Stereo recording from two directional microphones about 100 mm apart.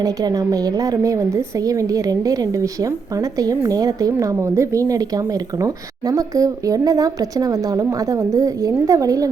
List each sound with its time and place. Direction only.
0.0 s a woman's voice: 35° right (ahead or behind)